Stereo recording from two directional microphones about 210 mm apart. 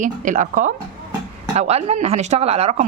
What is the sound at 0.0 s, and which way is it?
Speech, 35° right (ahead or behind).